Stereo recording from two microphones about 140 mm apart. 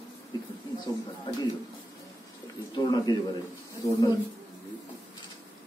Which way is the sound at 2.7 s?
35° left (ahead or behind).